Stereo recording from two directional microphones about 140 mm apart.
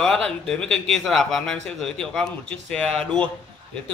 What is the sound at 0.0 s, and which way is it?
A man's voice, 5° left (ahead or behind).